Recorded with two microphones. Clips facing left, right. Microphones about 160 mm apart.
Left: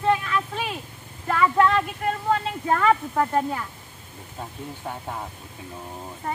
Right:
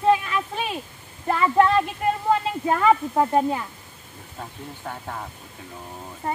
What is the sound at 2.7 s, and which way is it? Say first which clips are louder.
Speech: right 1 dB; 20° right (ahead or behind).